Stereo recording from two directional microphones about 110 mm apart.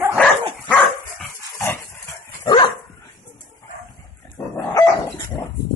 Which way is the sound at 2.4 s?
50° left (ahead or behind).